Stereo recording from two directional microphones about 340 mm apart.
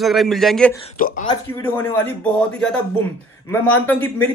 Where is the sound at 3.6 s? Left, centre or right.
Centre.